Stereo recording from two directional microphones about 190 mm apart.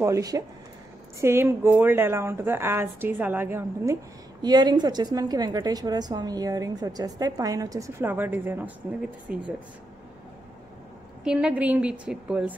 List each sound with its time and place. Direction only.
0.0 s a woman's voice: 15° right (ahead or behind)
9.3 s speech: 50° right (ahead or behind)
11.2 s a woman's voice: 5° right (ahead or behind)